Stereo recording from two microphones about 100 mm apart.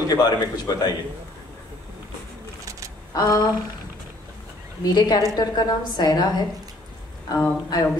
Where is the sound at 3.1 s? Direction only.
35° left (ahead or behind).